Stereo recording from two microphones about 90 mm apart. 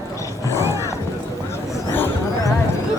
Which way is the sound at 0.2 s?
35° left (ahead or behind).